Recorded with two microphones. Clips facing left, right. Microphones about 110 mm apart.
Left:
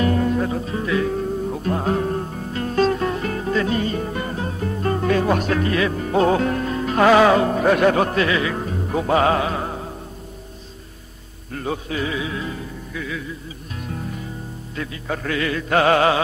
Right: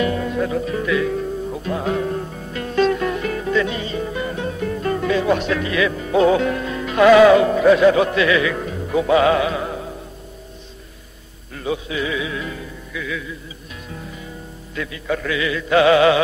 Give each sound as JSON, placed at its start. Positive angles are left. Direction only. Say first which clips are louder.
{"t": 0.0, "sound": "music", "louder": "left 1 dB", "side_deg": 40}
{"t": 11.5, "sound": "music", "louder": "right 1 dB", "side_deg": 45}
{"t": 13.8, "sound": "music", "louder": "left 4 dB", "side_deg": 50}
{"t": 14.8, "sound": "mantra", "louder": "right 3 dB", "side_deg": 40}